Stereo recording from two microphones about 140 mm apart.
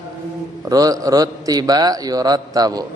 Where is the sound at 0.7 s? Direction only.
25° right (ahead or behind).